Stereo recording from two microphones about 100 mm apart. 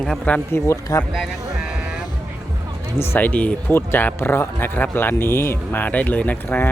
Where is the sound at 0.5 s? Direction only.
30° left (ahead or behind).